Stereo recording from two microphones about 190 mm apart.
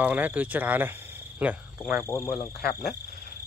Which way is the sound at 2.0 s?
15° left (ahead or behind).